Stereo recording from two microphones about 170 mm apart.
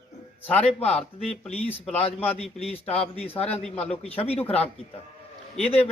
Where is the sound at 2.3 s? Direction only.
35° left (ahead or behind).